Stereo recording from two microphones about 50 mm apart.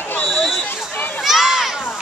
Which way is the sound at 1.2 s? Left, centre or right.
Centre.